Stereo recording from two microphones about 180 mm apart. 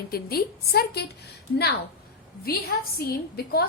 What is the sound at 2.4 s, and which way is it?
A woman's voice, 55° left (ahead or behind).